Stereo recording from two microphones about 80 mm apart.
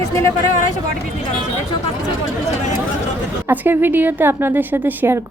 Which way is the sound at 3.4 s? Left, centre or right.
Right.